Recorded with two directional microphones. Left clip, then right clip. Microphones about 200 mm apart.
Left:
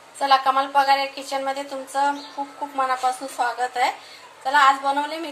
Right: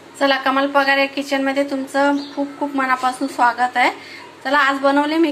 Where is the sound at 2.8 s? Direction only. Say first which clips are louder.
Right 3 dB; centre (ahead or behind).